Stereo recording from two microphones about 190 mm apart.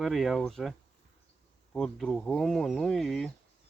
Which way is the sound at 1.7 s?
5° left (ahead or behind).